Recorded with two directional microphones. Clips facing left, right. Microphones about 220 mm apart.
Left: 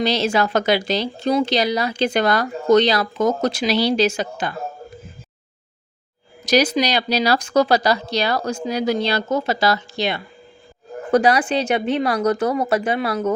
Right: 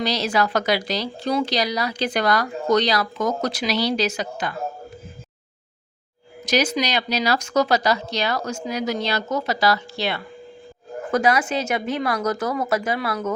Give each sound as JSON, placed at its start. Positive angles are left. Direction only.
{"t": 0.0, "sound": "a woman's voice", "side_deg": 25}
{"t": 6.4, "sound": "speech", "side_deg": 35}
{"t": 11.1, "sound": "speech", "side_deg": 35}